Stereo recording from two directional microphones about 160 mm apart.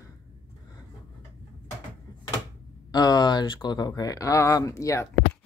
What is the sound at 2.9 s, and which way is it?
Speech, 25° left (ahead or behind).